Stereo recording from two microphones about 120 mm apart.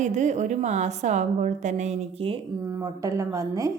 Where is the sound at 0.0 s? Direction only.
80° right.